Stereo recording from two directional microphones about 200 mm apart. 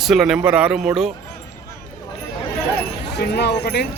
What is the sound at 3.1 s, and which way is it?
Speech, 55° left (ahead or behind).